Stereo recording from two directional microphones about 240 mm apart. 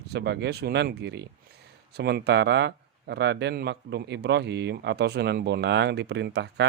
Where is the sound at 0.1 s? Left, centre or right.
Right.